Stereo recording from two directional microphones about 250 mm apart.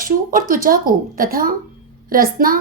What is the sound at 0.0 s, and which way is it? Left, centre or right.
Speech, right.